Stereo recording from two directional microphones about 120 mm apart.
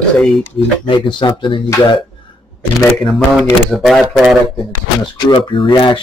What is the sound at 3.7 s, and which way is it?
Speech, centre (ahead or behind).